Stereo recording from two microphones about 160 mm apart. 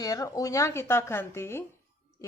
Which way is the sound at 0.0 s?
20° left (ahead or behind).